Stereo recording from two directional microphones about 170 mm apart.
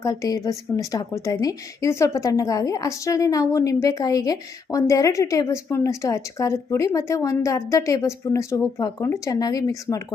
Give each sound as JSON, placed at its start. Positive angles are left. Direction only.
{"t": 0.0, "sound": "a woman's voice", "side_deg": 20}